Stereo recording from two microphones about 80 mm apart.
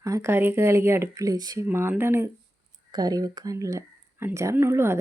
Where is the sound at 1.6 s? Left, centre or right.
Right.